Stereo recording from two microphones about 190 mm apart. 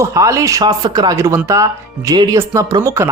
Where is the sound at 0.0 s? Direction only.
15° right (ahead or behind).